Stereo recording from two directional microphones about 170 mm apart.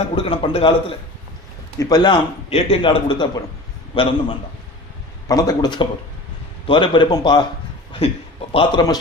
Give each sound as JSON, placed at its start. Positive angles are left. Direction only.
{"t": 0.2, "sound": "a man's voice", "side_deg": 35}
{"t": 2.5, "sound": "a man's voice", "side_deg": 35}
{"t": 8.5, "sound": "speech", "side_deg": 25}